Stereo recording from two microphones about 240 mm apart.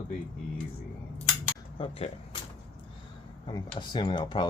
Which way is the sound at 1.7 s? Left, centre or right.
Left.